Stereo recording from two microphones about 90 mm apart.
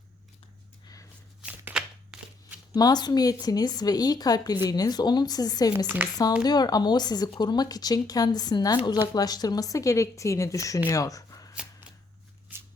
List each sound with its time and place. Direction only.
1.4 s shuffling cards: 10° right (ahead or behind)
2.7 s a woman's voice: 50° left (ahead or behind)